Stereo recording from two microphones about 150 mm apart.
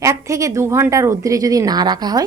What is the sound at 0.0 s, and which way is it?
A woman's voice, 20° right (ahead or behind).